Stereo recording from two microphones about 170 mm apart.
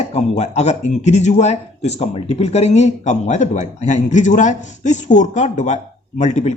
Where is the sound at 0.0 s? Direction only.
40° left (ahead or behind).